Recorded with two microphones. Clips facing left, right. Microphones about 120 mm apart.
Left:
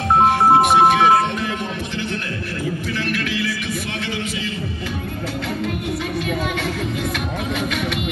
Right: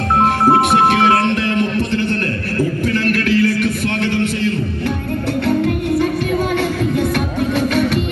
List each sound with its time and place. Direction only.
0.7 s music: 70° right (ahead or behind)
2.9 s music: 55° right (ahead or behind)
7.5 s music: 40° right (ahead or behind)